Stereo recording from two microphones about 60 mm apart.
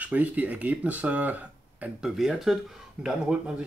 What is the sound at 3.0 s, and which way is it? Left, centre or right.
Speech, right.